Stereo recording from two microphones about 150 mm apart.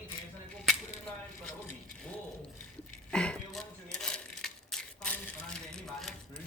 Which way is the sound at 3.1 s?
5° left (ahead or behind).